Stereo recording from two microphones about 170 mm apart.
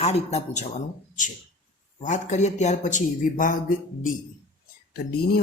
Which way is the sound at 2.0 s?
45° left (ahead or behind).